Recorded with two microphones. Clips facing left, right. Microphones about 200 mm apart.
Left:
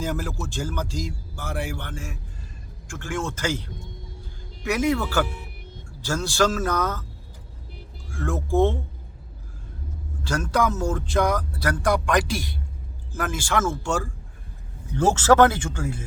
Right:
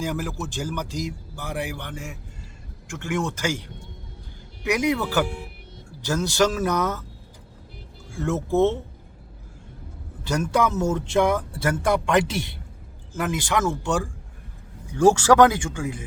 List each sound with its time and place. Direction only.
0.0 s a man's voice: 15° right (ahead or behind)
8.1 s speech: 25° right (ahead or behind)
10.5 s a man's voice: 20° right (ahead or behind)